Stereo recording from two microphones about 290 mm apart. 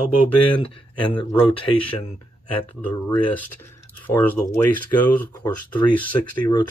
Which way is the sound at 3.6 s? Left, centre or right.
Centre.